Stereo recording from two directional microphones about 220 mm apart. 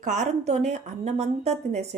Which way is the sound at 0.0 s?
35° right (ahead or behind).